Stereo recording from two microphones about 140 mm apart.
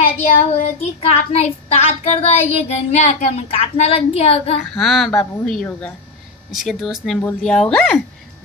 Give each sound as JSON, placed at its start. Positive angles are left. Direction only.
{"t": 0.2, "sound": "child singing", "side_deg": 60}
{"t": 4.7, "sound": "speech", "side_deg": 0}
{"t": 5.2, "sound": "speech", "side_deg": 15}
{"t": 6.5, "sound": "speech", "side_deg": 0}